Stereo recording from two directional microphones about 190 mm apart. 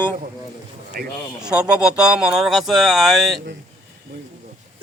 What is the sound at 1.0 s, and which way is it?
Speech, 50° right (ahead or behind).